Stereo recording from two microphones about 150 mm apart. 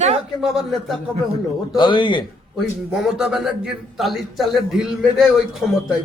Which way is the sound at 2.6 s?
Centre (ahead or behind).